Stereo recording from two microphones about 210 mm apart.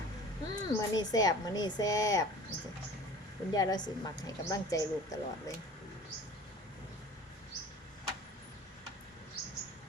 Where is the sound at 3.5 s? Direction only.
20° left (ahead or behind).